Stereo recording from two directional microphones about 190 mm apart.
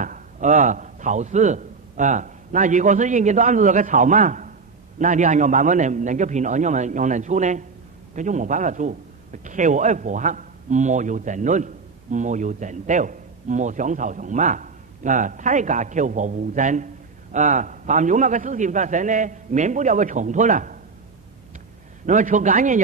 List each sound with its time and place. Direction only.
0.0 s a man's voice: 40° right (ahead or behind)
22.0 s a man's voice: 40° right (ahead or behind)